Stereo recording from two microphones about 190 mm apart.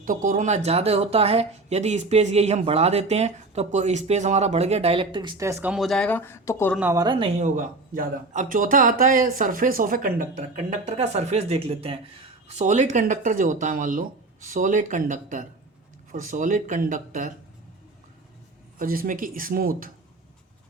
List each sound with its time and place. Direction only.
0.0 s speech: 45° right (ahead or behind); by 5.7 s 15° right (ahead or behind)
5.7 s speech: centre (ahead or behind)
6.7 s speech: 15° right (ahead or behind)
7.3 s speech: 40° right (ahead or behind)
18.8 s speech: 50° right (ahead or behind)